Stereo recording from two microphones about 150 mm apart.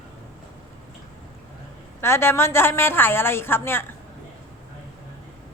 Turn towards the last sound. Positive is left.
turn(degrees=15)  # may be behind; listen again after turning